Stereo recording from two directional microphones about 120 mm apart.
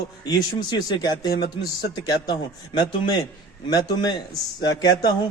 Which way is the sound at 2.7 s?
40° left (ahead or behind).